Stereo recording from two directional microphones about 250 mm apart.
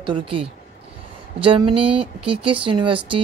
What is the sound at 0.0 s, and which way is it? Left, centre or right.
Speech, right.